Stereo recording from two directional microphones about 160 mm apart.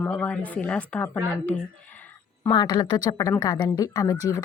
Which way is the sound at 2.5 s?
25° left (ahead or behind).